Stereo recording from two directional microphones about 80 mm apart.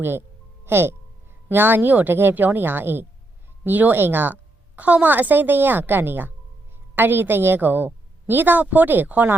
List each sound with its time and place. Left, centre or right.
0.0 s music: right
1.5 s a woman's voice: right